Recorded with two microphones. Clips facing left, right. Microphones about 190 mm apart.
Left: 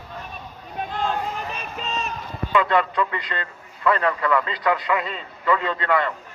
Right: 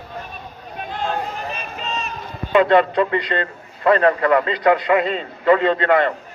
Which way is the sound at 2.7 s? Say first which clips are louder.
Right 6 dB; 70° right (ahead or behind).